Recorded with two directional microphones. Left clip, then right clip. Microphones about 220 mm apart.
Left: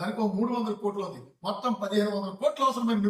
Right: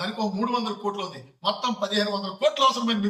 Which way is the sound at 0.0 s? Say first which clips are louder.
Right 2 dB; 5° left (ahead or behind).